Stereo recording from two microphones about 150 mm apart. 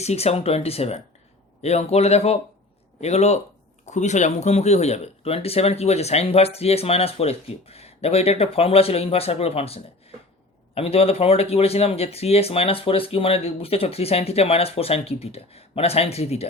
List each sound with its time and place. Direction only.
0.0 s speech: 45° left (ahead or behind)